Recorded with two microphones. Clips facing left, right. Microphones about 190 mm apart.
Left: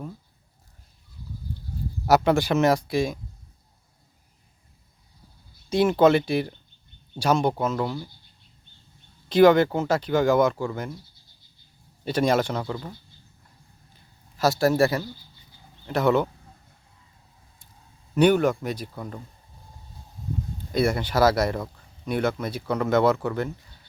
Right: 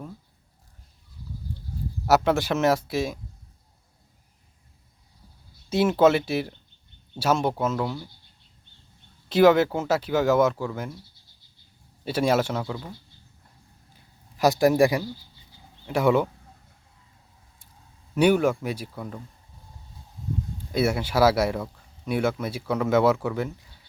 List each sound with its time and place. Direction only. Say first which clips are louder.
2.0 s speech: left 1 dB; centre (ahead or behind)
5.6 s speech: left 1 dB; 5° right (ahead or behind)
9.3 s speech: left 1 dB; 5° right (ahead or behind)
12.0 s speech: left 1 dB; 5° right (ahead or behind)
14.3 s speech: right 2 dB; 15° right (ahead or behind)
18.1 s speech: left 1 dB; 5° right (ahead or behind)
20.7 s speech: even; 5° right (ahead or behind)